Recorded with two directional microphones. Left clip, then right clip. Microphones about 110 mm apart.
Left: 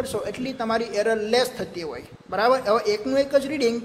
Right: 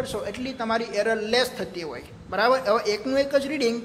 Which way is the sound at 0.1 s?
35° left (ahead or behind).